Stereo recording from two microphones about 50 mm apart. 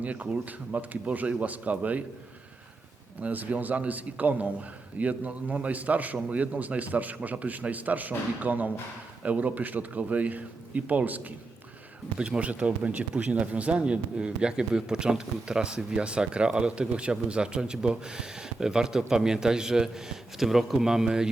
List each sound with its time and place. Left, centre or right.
0.0 s a man's voice: right
3.2 s a man's voice: right
12.1 s speech: right